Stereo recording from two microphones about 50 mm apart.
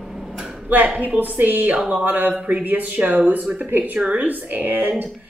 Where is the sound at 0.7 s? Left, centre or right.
Right.